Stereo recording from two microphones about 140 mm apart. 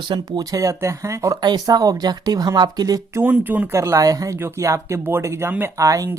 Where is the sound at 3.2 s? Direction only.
10° right (ahead or behind).